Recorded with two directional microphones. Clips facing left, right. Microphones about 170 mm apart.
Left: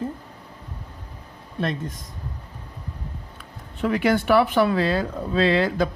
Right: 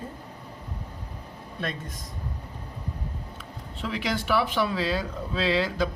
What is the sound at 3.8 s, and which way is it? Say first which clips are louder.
Speech: left 9 dB; 55° left (ahead or behind).